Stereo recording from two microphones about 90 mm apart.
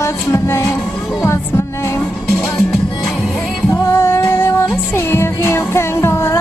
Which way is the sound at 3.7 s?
25° left (ahead or behind).